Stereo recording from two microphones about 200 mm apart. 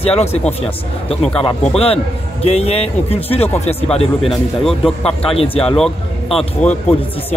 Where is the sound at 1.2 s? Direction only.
5° left (ahead or behind).